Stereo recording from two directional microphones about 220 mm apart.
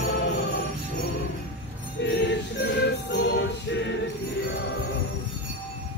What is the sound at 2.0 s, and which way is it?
Music, 55° left (ahead or behind).